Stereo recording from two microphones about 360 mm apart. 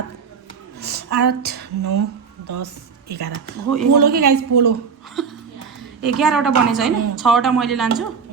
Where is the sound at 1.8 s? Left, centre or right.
Right.